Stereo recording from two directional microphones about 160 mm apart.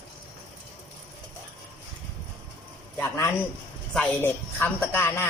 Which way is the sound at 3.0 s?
15° left (ahead or behind).